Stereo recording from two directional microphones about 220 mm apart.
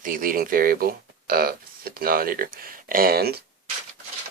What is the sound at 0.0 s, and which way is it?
Speech, 40° right (ahead or behind).